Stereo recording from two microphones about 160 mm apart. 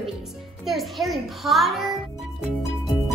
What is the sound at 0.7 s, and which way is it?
A child's voice, centre (ahead or behind).